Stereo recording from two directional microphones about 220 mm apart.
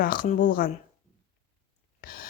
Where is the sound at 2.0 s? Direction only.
40° left (ahead or behind).